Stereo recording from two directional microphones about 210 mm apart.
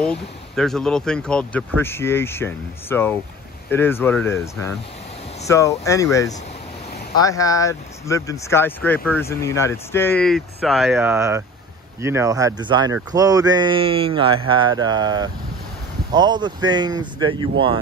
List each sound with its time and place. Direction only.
0.0 s speech: 5° left (ahead or behind); by 17.7 s 25° right (ahead or behind)